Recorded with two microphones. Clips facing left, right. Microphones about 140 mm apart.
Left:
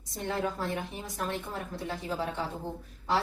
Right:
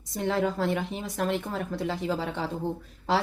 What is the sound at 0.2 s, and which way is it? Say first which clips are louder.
A woman's voice: right 6 dB; 90° right.